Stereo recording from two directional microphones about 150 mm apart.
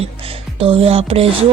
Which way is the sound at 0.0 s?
40° right (ahead or behind).